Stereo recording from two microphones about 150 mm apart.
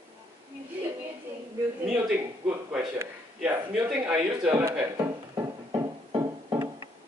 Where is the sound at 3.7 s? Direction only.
5° right (ahead or behind).